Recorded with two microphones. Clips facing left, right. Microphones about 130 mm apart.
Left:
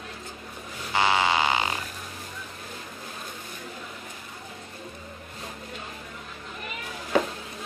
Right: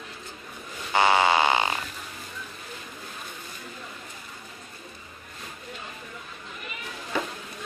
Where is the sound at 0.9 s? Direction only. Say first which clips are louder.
Right 3 dB; 25° right (ahead or behind).